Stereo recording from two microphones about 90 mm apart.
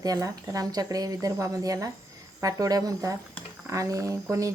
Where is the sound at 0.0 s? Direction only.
40° right (ahead or behind).